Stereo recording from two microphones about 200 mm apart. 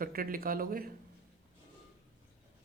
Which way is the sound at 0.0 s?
45° right (ahead or behind).